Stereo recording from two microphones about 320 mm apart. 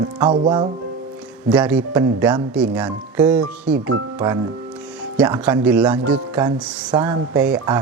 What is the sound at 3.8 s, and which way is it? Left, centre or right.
Speech, right.